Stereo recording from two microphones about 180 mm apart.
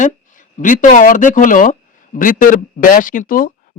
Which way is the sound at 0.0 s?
45° left (ahead or behind).